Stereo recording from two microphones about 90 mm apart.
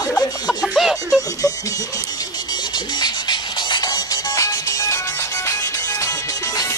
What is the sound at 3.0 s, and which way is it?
Music, 55° left (ahead or behind).